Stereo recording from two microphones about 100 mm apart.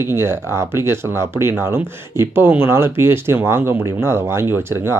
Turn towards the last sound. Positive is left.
turn(degrees=-25)  # may be behind; listen again after turning